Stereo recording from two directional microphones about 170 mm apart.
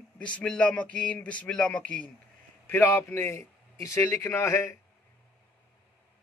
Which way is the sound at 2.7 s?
15° left (ahead or behind).